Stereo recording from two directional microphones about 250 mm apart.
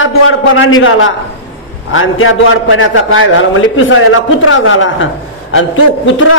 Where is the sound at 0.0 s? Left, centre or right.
Left.